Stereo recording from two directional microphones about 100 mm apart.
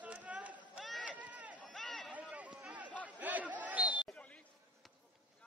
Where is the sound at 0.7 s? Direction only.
Centre (ahead or behind).